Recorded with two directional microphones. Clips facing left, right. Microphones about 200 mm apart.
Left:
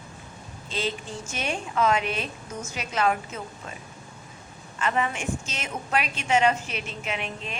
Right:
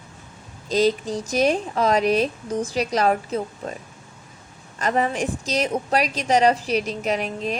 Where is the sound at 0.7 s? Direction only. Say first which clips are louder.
Right 11 dB; 40° right (ahead or behind).